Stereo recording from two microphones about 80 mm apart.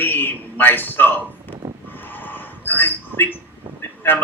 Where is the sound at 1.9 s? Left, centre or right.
Left.